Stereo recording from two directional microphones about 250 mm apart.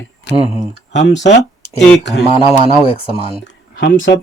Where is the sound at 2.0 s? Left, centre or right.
Left.